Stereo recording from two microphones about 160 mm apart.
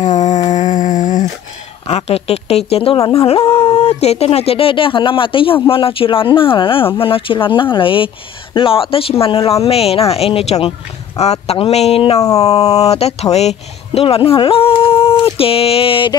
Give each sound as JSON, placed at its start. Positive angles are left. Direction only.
{"t": 0.0, "sound": "a sound", "side_deg": 50}
{"t": 1.9, "sound": "speech", "side_deg": 40}
{"t": 12.2, "sound": "speech", "side_deg": 20}
{"t": 12.6, "sound": "speech", "side_deg": 40}